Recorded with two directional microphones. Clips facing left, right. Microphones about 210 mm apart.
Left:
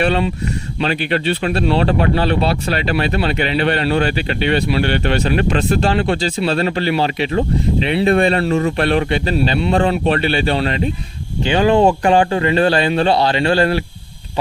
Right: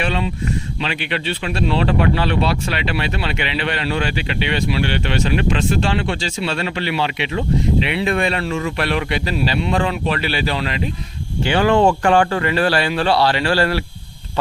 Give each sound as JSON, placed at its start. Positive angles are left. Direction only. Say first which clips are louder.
{"t": 0.0, "sound": "speech", "louder": "left 5 dB", "side_deg": 50}
{"t": 11.4, "sound": "speech", "louder": "left 2 dB", "side_deg": 20}